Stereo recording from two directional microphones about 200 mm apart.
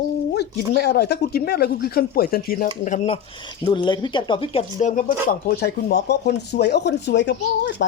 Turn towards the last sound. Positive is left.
turn(degrees=60)  # may be behind; listen again after turning